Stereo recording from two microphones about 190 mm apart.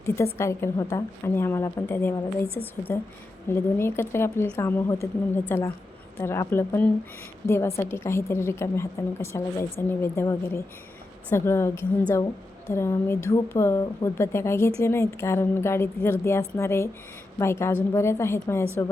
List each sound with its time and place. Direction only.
0.3 s a woman's voice: 15° left (ahead or behind)